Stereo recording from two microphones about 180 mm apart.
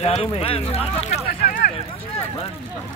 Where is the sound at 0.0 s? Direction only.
35° left (ahead or behind).